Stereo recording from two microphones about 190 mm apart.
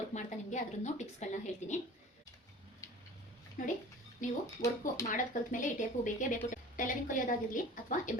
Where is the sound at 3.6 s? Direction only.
40° left (ahead or behind).